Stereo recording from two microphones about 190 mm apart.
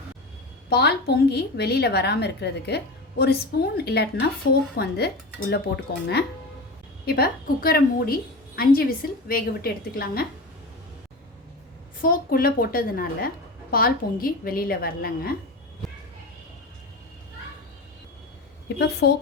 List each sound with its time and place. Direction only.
0.7 s a woman's voice: 60° left (ahead or behind)
12.0 s a woman's voice: 50° left (ahead or behind)
18.8 s a woman's voice: 60° left (ahead or behind)